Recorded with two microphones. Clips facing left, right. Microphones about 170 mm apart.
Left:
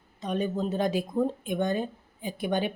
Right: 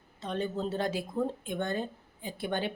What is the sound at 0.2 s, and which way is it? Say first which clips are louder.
Speech: left 4 dB; 15° left (ahead or behind).